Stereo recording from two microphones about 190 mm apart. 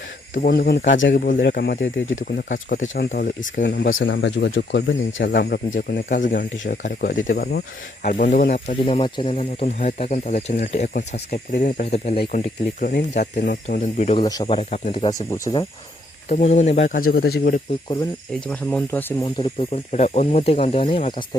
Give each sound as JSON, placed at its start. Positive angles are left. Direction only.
{"t": 0.3, "sound": "speech", "side_deg": 50}
{"t": 1.4, "sound": "speech", "side_deg": 55}
{"t": 1.8, "sound": "speech", "side_deg": 90}
{"t": 2.5, "sound": "speech", "side_deg": 45}
{"t": 12.8, "sound": "speech", "side_deg": 45}
{"t": 14.2, "sound": "speech", "side_deg": 25}
{"t": 16.3, "sound": "speech", "side_deg": 40}
{"t": 17.1, "sound": "speech", "side_deg": 55}
{"t": 18.3, "sound": "speech", "side_deg": 5}
{"t": 19.2, "sound": "speech", "side_deg": 30}